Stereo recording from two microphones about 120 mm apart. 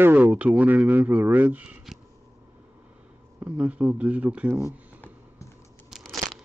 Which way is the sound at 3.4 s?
10° right (ahead or behind).